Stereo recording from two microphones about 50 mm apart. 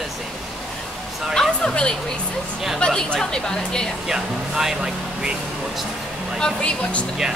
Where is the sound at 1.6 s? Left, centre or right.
Centre.